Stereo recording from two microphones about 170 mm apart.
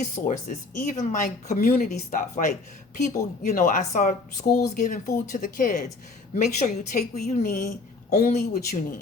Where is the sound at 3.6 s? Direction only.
50° left (ahead or behind).